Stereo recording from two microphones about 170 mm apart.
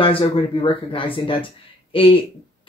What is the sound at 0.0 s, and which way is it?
Speech, 35° left (ahead or behind).